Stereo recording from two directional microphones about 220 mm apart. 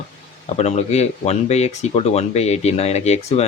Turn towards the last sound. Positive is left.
turn(degrees=30)  # may be behind; listen again after turning